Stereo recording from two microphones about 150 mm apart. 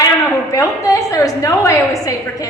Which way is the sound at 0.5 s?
20° left (ahead or behind).